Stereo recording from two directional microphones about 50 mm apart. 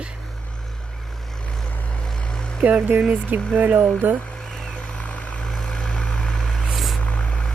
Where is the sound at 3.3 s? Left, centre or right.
Right.